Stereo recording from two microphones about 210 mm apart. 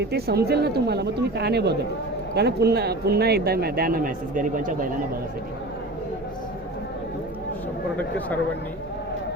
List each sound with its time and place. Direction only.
0.0 s a man's voice: 50° right (ahead or behind)